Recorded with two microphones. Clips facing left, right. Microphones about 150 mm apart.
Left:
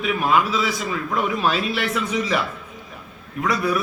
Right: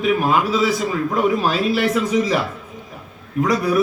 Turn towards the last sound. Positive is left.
turn(degrees=-40)  # may be behind; listen again after turning